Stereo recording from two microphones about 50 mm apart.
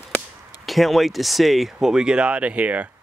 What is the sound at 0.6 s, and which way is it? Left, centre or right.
Speech, centre.